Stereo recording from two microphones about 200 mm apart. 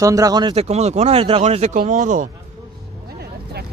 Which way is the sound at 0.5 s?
30° right (ahead or behind).